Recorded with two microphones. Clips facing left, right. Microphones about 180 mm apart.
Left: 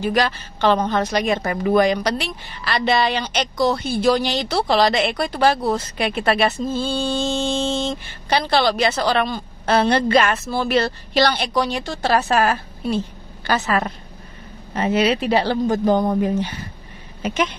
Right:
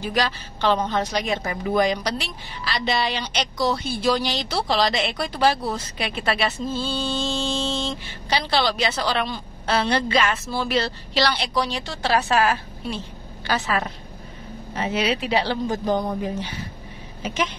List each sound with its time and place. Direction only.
0.0 s a woman's voice: 55° left (ahead or behind)